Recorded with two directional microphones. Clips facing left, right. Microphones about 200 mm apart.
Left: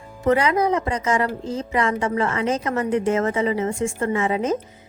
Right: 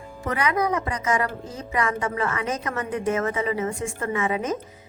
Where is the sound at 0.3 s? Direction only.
30° left (ahead or behind).